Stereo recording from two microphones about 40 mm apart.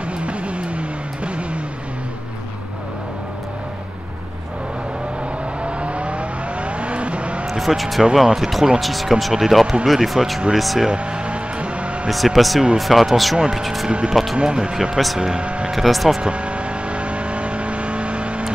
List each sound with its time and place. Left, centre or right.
0.2 s music: right
5.6 s vehicle: right
7.4 s speech: centre
8.4 s a sound: centre
8.7 s speech: centre
10.9 s vehicle: right
12.1 s speech: centre
13.8 s speech: right
15.4 s speech: right
15.7 s speech: centre
16.2 s vehicle: right